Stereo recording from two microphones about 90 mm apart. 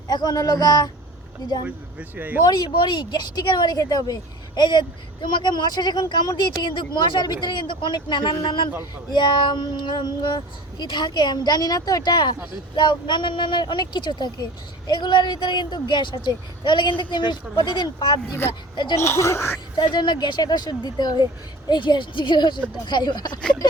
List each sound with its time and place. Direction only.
0.1 s speech: 50° left (ahead or behind)
1.6 s speech: 15° right (ahead or behind)
2.4 s speech: 50° left (ahead or behind)
18.4 s speech: 25° left (ahead or behind)
19.7 s speech: 55° left (ahead or behind)